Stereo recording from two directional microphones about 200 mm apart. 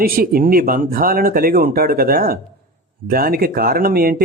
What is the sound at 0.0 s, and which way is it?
Speech, 45° right (ahead or behind).